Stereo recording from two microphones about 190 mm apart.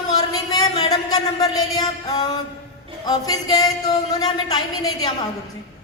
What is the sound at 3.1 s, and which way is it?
Speech, 20° left (ahead or behind).